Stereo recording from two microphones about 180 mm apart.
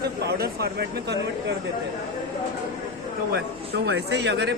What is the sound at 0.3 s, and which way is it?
Speech, 60° right (ahead or behind).